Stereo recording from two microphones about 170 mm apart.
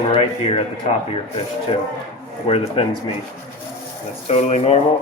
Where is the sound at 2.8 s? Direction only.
30° left (ahead or behind).